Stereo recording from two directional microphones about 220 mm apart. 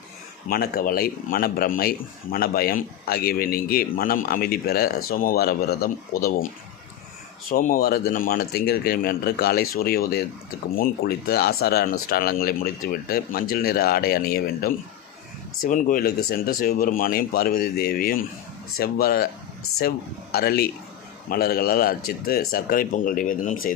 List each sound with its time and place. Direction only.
0.4 s speech: 45° left (ahead or behind)
7.5 s speech: 40° left (ahead or behind)
20.3 s speech: 45° left (ahead or behind)